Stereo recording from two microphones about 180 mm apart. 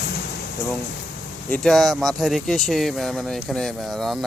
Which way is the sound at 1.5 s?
5° left (ahead or behind).